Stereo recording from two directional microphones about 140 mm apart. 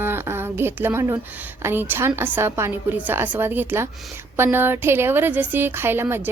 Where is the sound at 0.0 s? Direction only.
15° right (ahead or behind).